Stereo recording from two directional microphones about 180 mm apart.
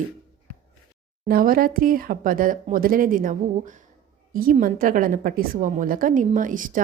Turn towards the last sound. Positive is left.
turn(degrees=-50)  # may be behind; listen again after turning